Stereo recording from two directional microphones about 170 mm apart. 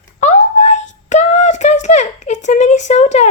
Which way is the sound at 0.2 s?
45° left (ahead or behind).